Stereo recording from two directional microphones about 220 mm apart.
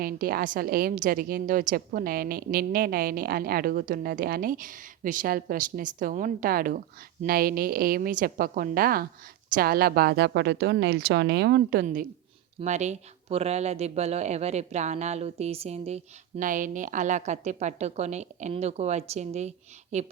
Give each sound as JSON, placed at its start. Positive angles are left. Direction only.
{"t": 0.0, "sound": "a woman's voice", "side_deg": -40}